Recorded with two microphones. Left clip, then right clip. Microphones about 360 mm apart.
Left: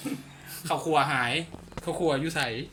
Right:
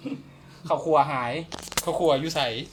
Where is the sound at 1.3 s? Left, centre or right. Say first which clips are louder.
Right 2 dB; right.